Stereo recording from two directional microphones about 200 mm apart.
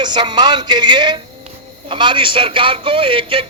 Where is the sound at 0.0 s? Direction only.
20° right (ahead or behind).